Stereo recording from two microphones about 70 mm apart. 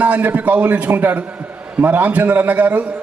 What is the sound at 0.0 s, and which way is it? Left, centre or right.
A man's voice, right.